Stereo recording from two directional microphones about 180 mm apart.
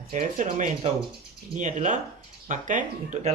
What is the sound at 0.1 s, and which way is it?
Speech, 45° right (ahead or behind).